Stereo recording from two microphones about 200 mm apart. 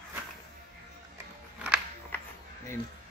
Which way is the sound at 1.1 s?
10° right (ahead or behind).